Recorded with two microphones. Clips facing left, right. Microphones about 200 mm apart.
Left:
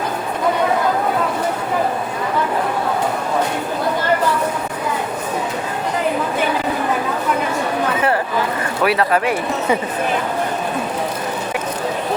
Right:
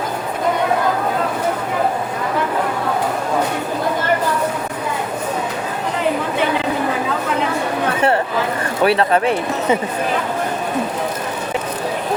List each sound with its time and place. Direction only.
8.8 s speech: 25° right (ahead or behind)